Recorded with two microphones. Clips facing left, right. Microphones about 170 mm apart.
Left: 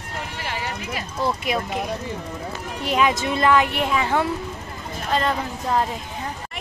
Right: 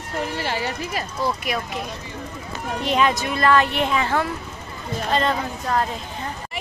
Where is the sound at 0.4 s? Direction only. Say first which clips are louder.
Right 4 dB; 30° right (ahead or behind).